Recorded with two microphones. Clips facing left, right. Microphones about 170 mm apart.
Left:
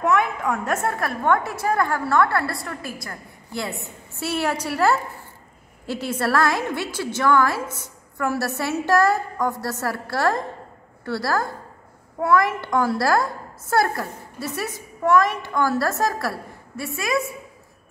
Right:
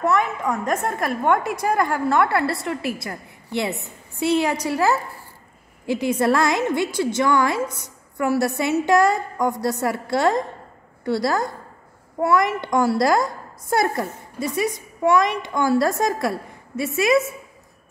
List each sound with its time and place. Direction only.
0.0 s a woman's voice: 10° left (ahead or behind)
0.4 s a child's voice: 10° right (ahead or behind)